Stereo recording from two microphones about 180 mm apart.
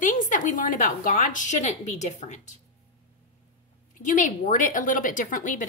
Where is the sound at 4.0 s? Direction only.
45° left (ahead or behind).